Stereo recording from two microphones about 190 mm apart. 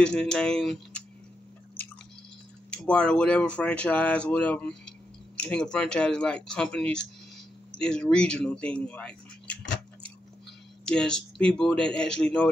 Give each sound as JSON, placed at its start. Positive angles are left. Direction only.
{"t": 0.0, "sound": "speech", "side_deg": 5}
{"t": 2.7, "sound": "speech", "side_deg": 5}
{"t": 10.9, "sound": "speech", "side_deg": 5}